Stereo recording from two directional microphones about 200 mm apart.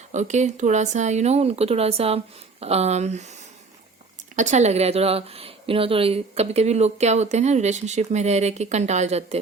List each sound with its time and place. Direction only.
0.1 s a woman's voice: 35° right (ahead or behind)
4.4 s a woman's voice: 35° right (ahead or behind)